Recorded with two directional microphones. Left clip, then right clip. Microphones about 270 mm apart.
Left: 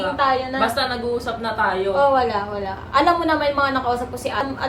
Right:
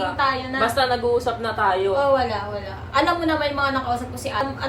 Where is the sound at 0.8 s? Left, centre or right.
Centre.